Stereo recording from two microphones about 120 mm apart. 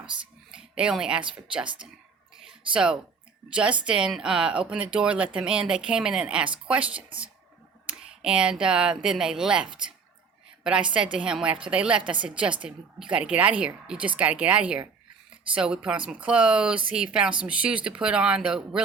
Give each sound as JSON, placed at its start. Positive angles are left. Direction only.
{"t": 0.5, "sound": "speech", "side_deg": -5}
{"t": 1.6, "sound": "speech", "side_deg": -45}
{"t": 2.4, "sound": "a sound", "side_deg": -5}
{"t": 3.5, "sound": "a woman's voice", "side_deg": -10}